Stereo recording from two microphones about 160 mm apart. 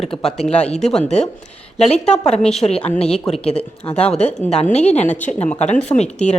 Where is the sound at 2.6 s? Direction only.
30° left (ahead or behind).